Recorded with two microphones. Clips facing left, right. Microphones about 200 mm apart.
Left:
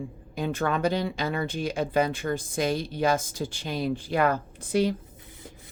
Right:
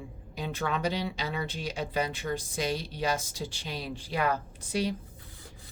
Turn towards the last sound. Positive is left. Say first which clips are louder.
# left 6 dB
turn(degrees=55)  # may be behind; listen again after turning